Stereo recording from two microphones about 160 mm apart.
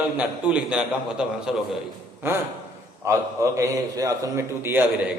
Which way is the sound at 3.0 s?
20° right (ahead or behind).